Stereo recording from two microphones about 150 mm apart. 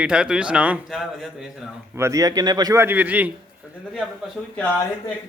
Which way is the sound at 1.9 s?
20° right (ahead or behind).